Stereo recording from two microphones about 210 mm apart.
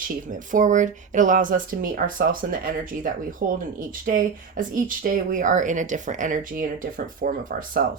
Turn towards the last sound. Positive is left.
turn(degrees=-40)  # may be behind; listen again after turning